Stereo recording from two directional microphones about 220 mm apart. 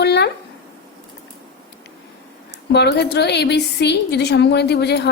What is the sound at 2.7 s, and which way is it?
A woman's voice, 50° left (ahead or behind).